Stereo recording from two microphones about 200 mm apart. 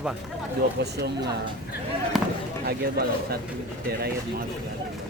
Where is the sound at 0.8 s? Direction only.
55° right (ahead or behind).